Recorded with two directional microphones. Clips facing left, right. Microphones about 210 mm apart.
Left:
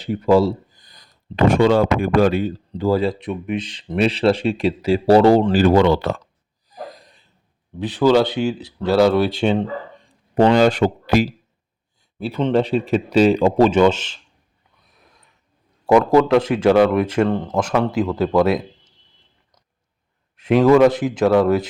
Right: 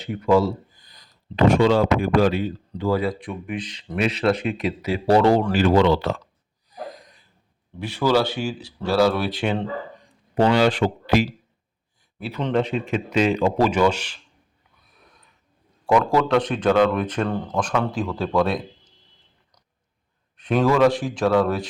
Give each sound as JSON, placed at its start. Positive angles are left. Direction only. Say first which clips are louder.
{"t": 0.0, "sound": "speech", "louder": "left 3 dB", "side_deg": 35}
{"t": 5.7, "sound": "speech", "louder": "left 3 dB", "side_deg": 50}
{"t": 6.9, "sound": "a sound", "louder": "right 1 dB", "side_deg": 30}
{"t": 7.8, "sound": "speech", "louder": "left 5 dB", "side_deg": 20}
{"t": 10.3, "sound": "speech", "louder": "left 4 dB", "side_deg": 45}
{"t": 12.2, "sound": "speech", "louder": "left 4 dB", "side_deg": 30}
{"t": 15.9, "sound": "speech", "louder": "left 5 dB", "side_deg": 20}
{"t": 16.4, "sound": "speech", "louder": "left 4 dB", "side_deg": 10}
{"t": 17.2, "sound": "speech", "louder": "left 4 dB", "side_deg": 20}
{"t": 20.5, "sound": "speech", "louder": "left 5 dB", "side_deg": 20}